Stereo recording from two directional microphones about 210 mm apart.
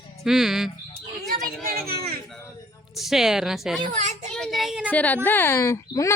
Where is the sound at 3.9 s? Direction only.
35° right (ahead or behind).